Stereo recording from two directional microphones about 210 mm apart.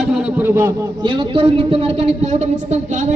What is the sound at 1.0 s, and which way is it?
A woman's voice, 25° right (ahead or behind).